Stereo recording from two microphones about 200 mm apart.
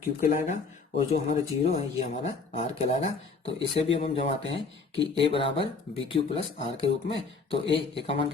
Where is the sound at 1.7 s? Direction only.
30° left (ahead or behind).